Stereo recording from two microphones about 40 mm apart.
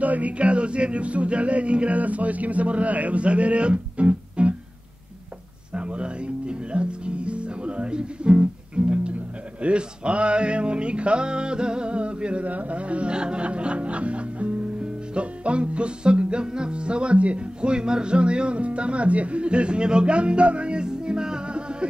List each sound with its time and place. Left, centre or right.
0.0 s music: right
5.8 s music: right